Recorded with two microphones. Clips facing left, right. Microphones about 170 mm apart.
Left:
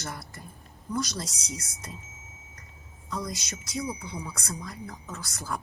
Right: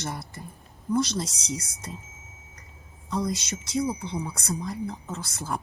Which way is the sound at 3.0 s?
30° right (ahead or behind).